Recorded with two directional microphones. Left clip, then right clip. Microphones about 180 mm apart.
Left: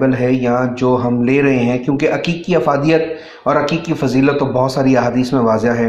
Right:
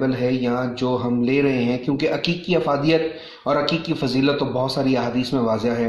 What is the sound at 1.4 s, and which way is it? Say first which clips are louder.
Speech: left 6 dB; 10° left (ahead or behind).